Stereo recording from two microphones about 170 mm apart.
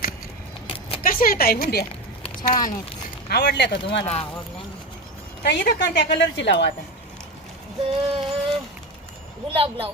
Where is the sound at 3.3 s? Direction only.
80° left.